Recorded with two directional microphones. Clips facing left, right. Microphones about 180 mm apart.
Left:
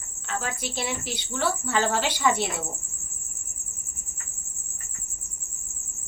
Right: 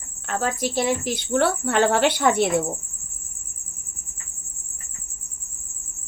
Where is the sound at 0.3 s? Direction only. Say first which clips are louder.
Right 7 dB; 45° right (ahead or behind).